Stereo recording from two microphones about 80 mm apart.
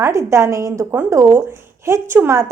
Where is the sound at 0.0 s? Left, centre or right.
Right.